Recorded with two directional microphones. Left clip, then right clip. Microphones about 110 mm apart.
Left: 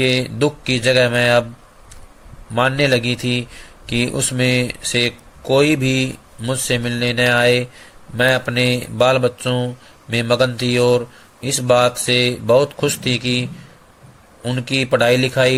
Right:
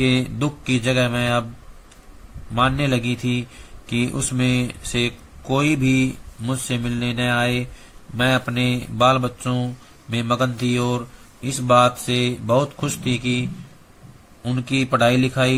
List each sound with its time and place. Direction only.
0.0 s speech: 35° left (ahead or behind)
2.6 s speech: 35° left (ahead or behind)
14.7 s speech: 35° left (ahead or behind)